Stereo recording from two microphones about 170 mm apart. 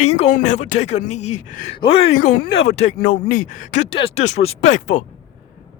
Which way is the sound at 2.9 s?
55° left (ahead or behind).